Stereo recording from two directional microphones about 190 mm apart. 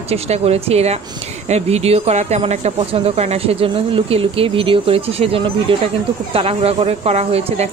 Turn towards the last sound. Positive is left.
turn(degrees=-35)  # may be behind; listen again after turning